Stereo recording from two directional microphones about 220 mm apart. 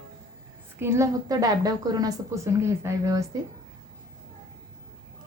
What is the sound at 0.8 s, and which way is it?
A woman's voice, 15° right (ahead or behind).